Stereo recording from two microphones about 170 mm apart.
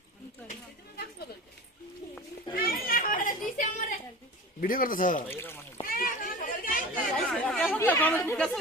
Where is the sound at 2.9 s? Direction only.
55° left (ahead or behind).